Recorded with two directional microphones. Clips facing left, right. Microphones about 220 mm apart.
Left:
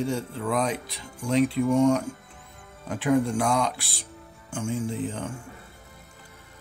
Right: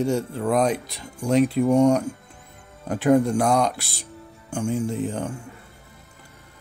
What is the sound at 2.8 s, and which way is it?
Speech, 45° right (ahead or behind).